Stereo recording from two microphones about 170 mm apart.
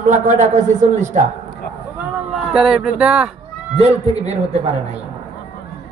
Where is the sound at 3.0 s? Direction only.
5° right (ahead or behind).